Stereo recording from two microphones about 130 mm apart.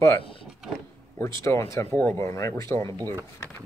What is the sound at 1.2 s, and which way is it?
Speech, 20° left (ahead or behind).